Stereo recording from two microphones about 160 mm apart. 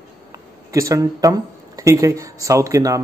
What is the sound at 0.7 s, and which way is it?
Speech, 20° right (ahead or behind).